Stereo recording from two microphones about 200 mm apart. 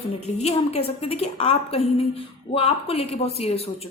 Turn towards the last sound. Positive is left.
turn(degrees=30)  # may be behind; listen again after turning